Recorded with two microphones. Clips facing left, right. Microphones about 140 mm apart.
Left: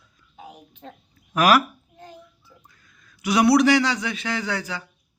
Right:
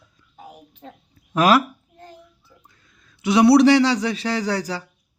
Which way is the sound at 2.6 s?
25° right (ahead or behind).